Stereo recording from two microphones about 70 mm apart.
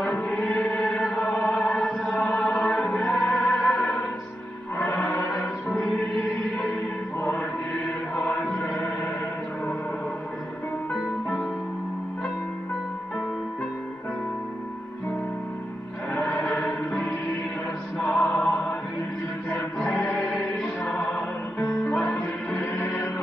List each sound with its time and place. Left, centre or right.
0.0 s music: left
7.2 s mantra: left
8.2 s music: centre
16.1 s choir: left
18.1 s music: centre